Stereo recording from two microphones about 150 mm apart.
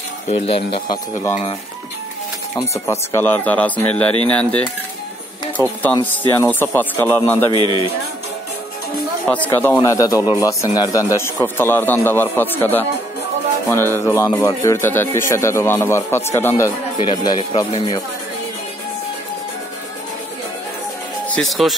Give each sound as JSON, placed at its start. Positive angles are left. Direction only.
{"t": 0.3, "sound": "speech", "side_deg": 40}
{"t": 2.7, "sound": "speech", "side_deg": 20}
{"t": 5.6, "sound": "speech", "side_deg": 20}
{"t": 7.5, "sound": "speech", "side_deg": -30}
{"t": 9.3, "sound": "speech", "side_deg": 10}
{"t": 9.8, "sound": "speech", "side_deg": 20}
{"t": 17.0, "sound": "speech", "side_deg": 30}
{"t": 21.3, "sound": "speech", "side_deg": 0}